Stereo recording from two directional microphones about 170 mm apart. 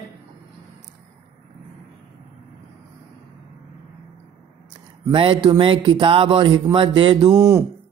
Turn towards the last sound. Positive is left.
turn(degrees=-15)  # may be behind; listen again after turning